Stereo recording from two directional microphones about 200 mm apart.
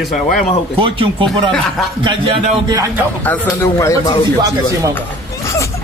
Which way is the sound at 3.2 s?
10° left (ahead or behind).